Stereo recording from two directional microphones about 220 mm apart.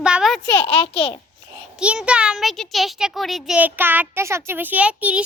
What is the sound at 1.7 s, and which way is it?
A child's voice, 5° right (ahead or behind).